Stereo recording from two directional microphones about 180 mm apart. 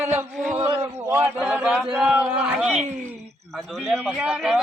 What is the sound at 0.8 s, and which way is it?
A man's voice, 15° right (ahead or behind).